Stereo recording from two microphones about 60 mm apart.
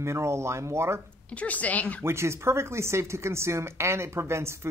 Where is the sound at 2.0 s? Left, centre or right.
Right.